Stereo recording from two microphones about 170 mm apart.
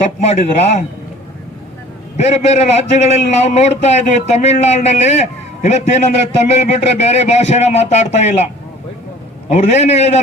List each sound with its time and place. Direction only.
0.0 s a man's voice: 40° left (ahead or behind)
2.1 s a man's voice: 40° left (ahead or behind)
9.5 s a man's voice: 40° left (ahead or behind)